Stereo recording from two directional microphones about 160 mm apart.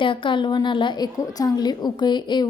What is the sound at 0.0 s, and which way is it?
A child's voice, 30° left (ahead or behind).